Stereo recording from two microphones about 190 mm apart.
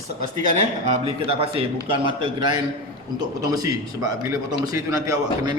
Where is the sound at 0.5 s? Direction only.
35° right (ahead or behind).